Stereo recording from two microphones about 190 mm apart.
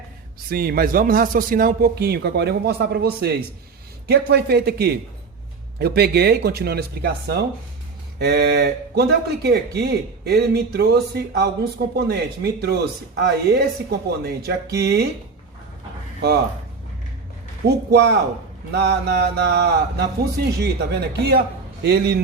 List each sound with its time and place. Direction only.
0.5 s a man's voice: 55° right (ahead or behind)
17.7 s speech: 65° right (ahead or behind)